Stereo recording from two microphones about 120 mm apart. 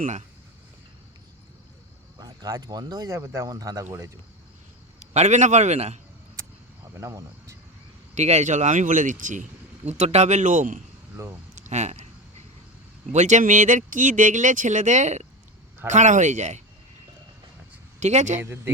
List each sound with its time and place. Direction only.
0.0 s speech: 80° right
2.2 s speech: 30° right (ahead or behind)
4.9 s a man's voice: 70° right (ahead or behind)
6.9 s speech: 25° right (ahead or behind)
8.1 s speech: 70° right (ahead or behind); by 10.8 s 90° right
11.5 s a sound: 80° right
13.1 s speech: 75° right (ahead or behind)
15.9 s speech: 90° right
18.0 s a man's voice: 75° right (ahead or behind)
18.3 s speech: 15° right (ahead or behind)